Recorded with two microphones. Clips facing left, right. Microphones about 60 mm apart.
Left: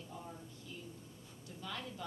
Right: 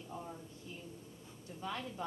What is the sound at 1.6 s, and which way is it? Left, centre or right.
Speech, right.